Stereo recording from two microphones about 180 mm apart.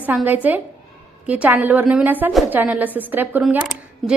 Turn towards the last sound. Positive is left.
turn(degrees=5)  # may be behind; listen again after turning